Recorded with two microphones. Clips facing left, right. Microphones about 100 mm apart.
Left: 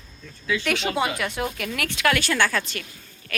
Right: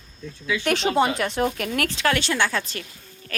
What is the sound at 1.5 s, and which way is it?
Speech, 40° right (ahead or behind).